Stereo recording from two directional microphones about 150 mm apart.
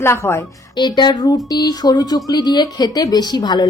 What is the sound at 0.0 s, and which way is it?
Speech, 15° left (ahead or behind).